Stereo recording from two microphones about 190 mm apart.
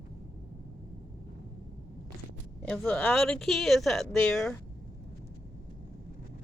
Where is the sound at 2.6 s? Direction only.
5° left (ahead or behind).